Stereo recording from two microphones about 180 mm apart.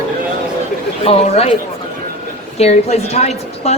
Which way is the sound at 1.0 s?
35° left (ahead or behind).